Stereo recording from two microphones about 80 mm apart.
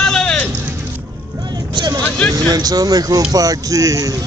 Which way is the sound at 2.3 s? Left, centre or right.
Right.